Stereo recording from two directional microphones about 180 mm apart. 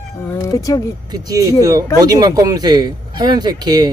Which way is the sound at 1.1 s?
20° right (ahead or behind).